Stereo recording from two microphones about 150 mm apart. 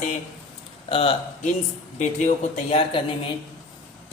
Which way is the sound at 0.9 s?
35° left (ahead or behind).